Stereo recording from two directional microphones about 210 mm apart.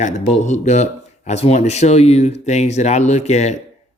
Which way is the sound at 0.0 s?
35° left (ahead or behind).